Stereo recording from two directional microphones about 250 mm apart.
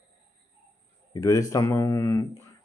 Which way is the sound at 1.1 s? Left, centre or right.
Centre.